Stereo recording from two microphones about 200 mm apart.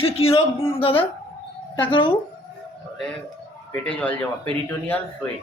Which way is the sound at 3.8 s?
5° left (ahead or behind).